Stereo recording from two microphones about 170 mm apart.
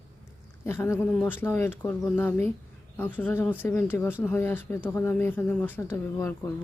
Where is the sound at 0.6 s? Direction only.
15° left (ahead or behind).